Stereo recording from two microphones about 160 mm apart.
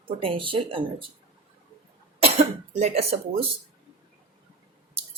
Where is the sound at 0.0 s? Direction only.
35° right (ahead or behind).